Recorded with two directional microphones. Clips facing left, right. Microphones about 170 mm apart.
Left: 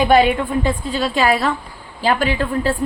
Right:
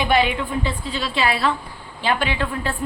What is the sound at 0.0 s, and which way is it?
A woman's voice, 45° left (ahead or behind).